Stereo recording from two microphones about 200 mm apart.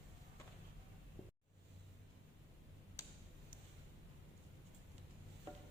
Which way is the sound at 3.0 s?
15° left (ahead or behind).